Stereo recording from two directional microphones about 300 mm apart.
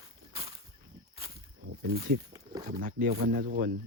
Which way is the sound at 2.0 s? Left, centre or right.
Right.